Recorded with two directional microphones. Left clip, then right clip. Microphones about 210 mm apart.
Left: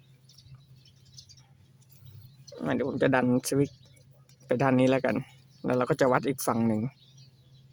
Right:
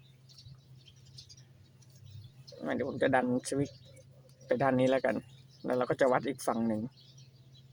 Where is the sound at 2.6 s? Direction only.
35° left (ahead or behind).